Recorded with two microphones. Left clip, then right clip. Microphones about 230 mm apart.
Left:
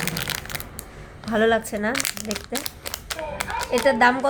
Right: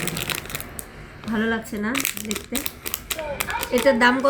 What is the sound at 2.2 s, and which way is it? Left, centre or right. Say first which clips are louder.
Speech: even; centre.